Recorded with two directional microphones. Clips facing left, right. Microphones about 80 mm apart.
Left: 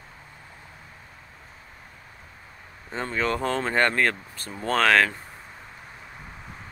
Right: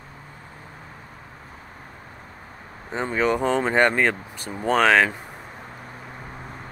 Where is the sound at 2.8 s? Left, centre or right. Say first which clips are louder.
Right 4 dB; centre.